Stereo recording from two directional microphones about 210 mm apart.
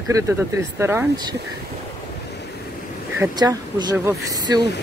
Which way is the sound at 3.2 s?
15° right (ahead or behind).